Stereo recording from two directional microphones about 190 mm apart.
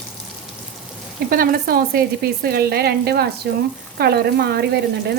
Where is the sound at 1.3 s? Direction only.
50° right (ahead or behind).